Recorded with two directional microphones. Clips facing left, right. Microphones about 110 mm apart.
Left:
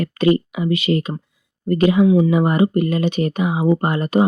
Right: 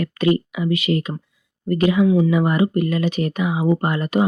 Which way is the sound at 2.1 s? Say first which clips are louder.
Left 2 dB; 15° left (ahead or behind).